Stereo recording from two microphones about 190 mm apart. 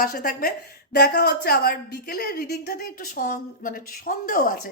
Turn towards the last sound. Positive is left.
turn(degrees=45)  # may be behind; listen again after turning